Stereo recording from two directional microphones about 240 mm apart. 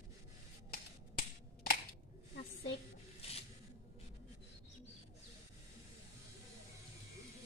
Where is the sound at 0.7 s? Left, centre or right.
Left.